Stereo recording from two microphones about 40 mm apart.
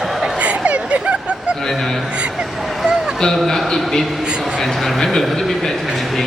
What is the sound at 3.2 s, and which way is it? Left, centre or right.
Speech, centre.